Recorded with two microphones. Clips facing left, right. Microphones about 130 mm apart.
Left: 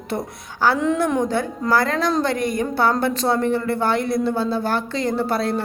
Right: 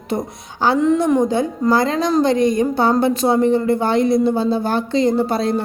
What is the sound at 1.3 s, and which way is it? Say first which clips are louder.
A woman's voice: right 4 dB; 15° right (ahead or behind).